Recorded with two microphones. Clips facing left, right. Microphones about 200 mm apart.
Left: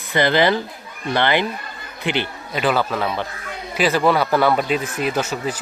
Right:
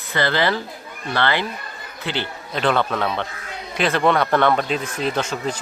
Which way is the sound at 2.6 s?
5° left (ahead or behind).